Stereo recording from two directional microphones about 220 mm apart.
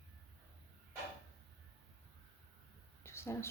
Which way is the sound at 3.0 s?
10° left (ahead or behind).